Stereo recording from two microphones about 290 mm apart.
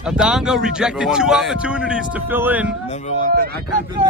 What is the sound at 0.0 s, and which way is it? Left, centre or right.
Speech, centre.